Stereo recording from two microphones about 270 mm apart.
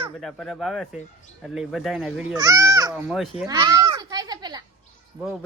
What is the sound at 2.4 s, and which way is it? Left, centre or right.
Speech, centre.